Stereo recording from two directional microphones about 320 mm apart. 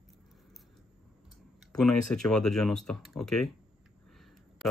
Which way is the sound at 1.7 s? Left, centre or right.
Centre.